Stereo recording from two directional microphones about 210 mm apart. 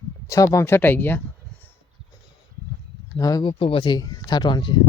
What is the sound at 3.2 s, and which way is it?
Speech, 15° left (ahead or behind).